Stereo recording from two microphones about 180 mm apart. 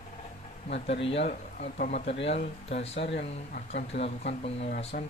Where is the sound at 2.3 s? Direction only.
35° left (ahead or behind).